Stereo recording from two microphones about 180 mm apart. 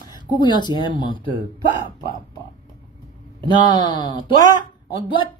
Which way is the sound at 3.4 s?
25° left (ahead or behind).